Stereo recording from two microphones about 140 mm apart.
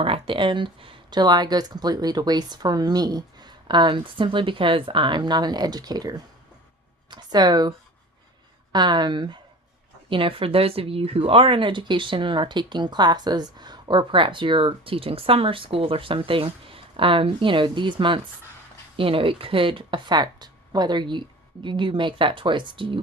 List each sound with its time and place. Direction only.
0.0 s speech: 40° right (ahead or behind)
8.7 s speech: 30° right (ahead or behind)